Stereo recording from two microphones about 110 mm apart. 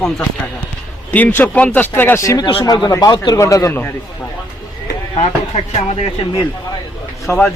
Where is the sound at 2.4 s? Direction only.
50° left (ahead or behind).